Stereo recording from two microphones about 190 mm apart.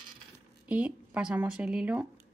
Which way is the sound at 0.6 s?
5° right (ahead or behind).